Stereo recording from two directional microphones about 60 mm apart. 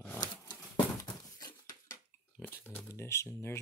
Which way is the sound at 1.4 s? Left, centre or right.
Left.